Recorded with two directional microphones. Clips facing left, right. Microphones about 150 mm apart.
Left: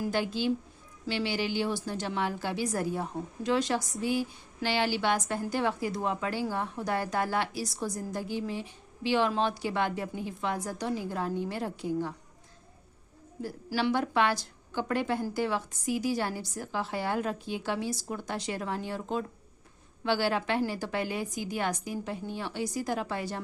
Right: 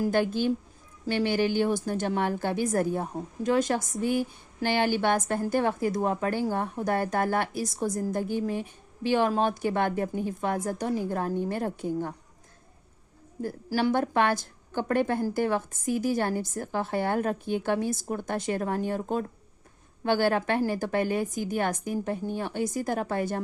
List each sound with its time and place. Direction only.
0.0 s a woman's voice: 50° right (ahead or behind)
13.4 s a woman's voice: 45° right (ahead or behind)